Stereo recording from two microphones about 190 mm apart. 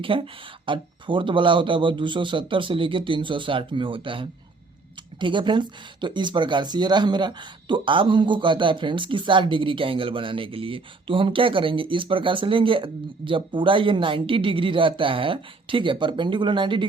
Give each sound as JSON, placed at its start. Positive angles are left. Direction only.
{"t": 0.0, "sound": "speech", "side_deg": -25}